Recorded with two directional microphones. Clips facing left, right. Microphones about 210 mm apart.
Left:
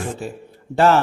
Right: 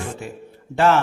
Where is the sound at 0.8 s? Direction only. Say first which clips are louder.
Left 2 dB; 40° left (ahead or behind).